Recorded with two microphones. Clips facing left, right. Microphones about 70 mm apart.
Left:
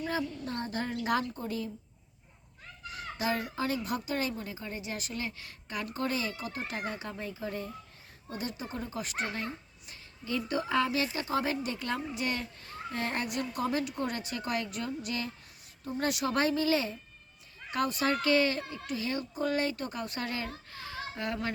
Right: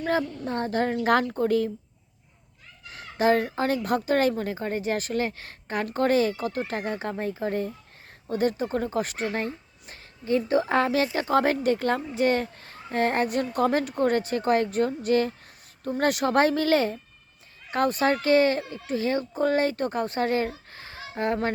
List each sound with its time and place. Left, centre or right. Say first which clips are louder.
0.0 s a woman's voice: right 7 dB; right
2.9 s a woman's voice: right 10 dB; right
20.7 s a sound: left 1 dB; right